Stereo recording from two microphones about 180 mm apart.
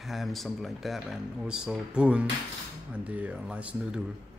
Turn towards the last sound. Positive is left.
turn(degrees=-5)  # may be behind; listen again after turning